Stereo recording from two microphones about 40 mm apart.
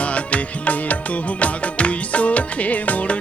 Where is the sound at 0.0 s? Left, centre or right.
Left.